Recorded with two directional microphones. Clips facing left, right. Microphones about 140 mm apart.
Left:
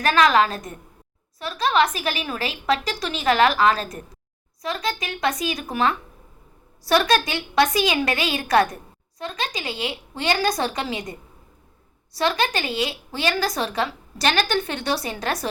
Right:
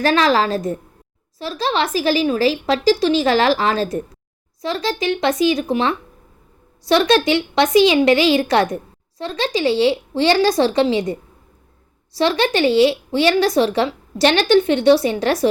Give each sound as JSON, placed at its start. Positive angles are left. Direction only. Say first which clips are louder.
{"t": 0.0, "sound": "a woman's voice", "louder": "right 2 dB", "side_deg": -30}